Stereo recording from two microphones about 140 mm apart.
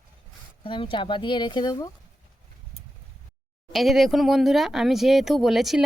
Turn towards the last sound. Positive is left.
turn(degrees=0)  # may be behind; listen again after turning